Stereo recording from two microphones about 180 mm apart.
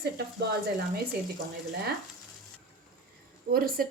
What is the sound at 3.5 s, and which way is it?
Speech, 55° right (ahead or behind).